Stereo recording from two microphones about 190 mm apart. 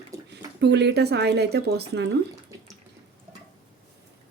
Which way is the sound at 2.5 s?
15° right (ahead or behind).